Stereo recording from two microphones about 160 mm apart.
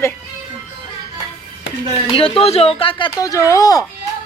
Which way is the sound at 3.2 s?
20° left (ahead or behind).